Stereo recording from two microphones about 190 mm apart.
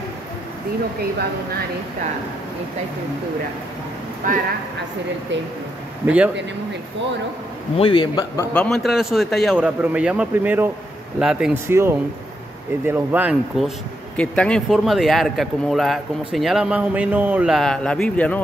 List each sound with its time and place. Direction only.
4.2 s speech: 45° right (ahead or behind)
6.0 s speech: 5° right (ahead or behind)
7.7 s a man's voice: 25° left (ahead or behind)
8.5 s speech: centre (ahead or behind)
14.1 s speech: 5° left (ahead or behind)